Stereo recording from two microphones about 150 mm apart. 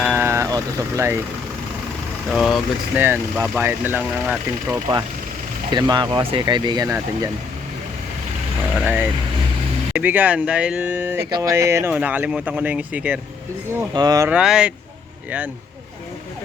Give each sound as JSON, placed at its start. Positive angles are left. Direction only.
{"t": 0.0, "sound": "vehicle", "side_deg": -15}
{"t": 2.3, "sound": "speech", "side_deg": 0}
{"t": 3.0, "sound": "speech", "side_deg": -15}
{"t": 5.7, "sound": "speech", "side_deg": -30}
{"t": 8.8, "sound": "speech", "side_deg": -10}
{"t": 11.3, "sound": "speech", "side_deg": -25}
{"t": 11.9, "sound": "speech", "side_deg": -10}
{"t": 13.9, "sound": "speech", "side_deg": -25}
{"t": 14.3, "sound": "speech", "side_deg": -5}